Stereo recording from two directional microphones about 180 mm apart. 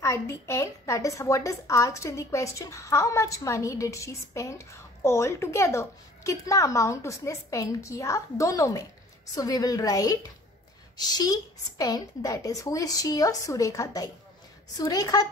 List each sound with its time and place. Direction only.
0.0 s a woman's voice: 15° left (ahead or behind)